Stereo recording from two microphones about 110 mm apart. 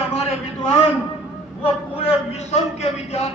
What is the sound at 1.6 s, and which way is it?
A man's voice, 60° left (ahead or behind).